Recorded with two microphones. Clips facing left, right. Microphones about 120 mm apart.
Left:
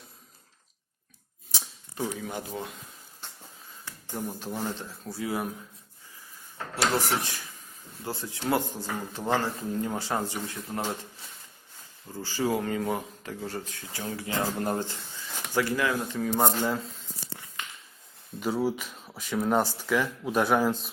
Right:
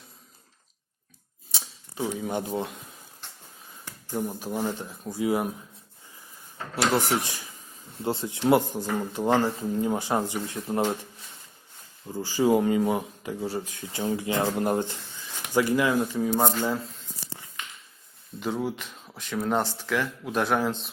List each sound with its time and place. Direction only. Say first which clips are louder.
2.1 s speech: right 6 dB; 20° right (ahead or behind)
3.8 s speech: right 4 dB; 15° right (ahead or behind)
6.9 s speech: right 3 dB; 15° right (ahead or behind)
12.0 s speech: right 6 dB; 15° right (ahead or behind)
18.3 s speech: left 2 dB; 5° left (ahead or behind)